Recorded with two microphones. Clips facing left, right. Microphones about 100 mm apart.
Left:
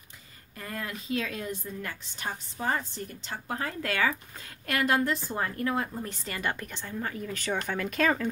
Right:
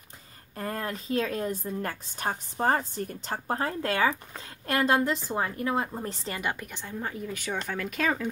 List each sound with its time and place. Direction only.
0.6 s a woman's voice: 40° right (ahead or behind)
6.4 s a woman's voice: 10° right (ahead or behind)
7.2 s speech: 10° right (ahead or behind)